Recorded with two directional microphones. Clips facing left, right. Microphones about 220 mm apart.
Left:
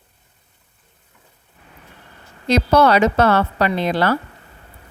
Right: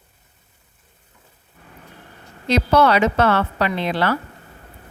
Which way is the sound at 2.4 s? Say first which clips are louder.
Left 2 dB; 40° left (ahead or behind).